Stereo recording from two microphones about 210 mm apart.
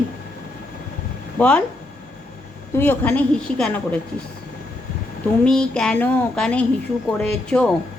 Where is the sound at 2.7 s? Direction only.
10° left (ahead or behind).